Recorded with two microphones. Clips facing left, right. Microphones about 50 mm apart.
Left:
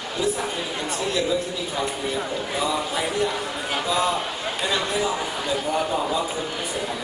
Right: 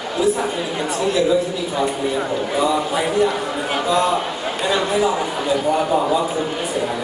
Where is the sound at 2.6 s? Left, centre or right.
Centre.